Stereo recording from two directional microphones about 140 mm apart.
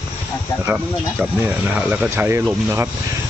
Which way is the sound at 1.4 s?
15° right (ahead or behind).